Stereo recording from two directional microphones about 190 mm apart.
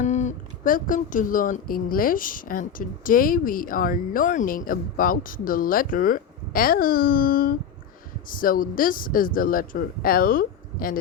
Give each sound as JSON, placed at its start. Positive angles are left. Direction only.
{"t": 0.0, "sound": "speech", "side_deg": 40}